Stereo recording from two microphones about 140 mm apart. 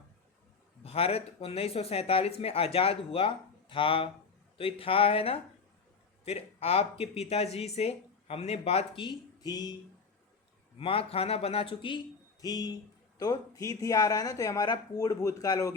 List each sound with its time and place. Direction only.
0.9 s speech: 45° left (ahead or behind)
9.0 s speech: 30° left (ahead or behind)
10.8 s speech: 40° left (ahead or behind)
12.4 s speech: 30° left (ahead or behind)